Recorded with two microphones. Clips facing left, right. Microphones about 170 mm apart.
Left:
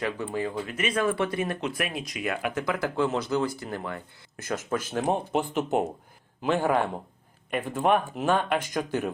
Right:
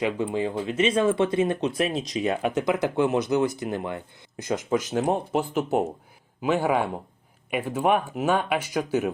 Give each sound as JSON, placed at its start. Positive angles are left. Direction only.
{"t": 0.0, "sound": "speech", "side_deg": -20}
{"t": 5.0, "sound": "speech", "side_deg": 0}